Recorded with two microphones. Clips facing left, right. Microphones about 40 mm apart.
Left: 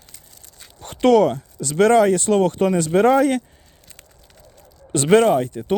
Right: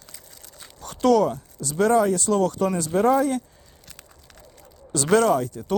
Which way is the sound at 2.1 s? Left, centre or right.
Left.